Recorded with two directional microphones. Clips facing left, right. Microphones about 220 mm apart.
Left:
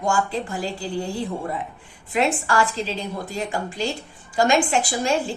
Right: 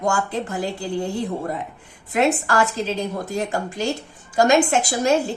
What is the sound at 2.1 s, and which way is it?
A woman's voice, 45° right (ahead or behind).